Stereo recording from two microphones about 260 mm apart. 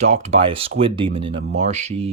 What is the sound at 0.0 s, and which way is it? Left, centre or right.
Speech, right.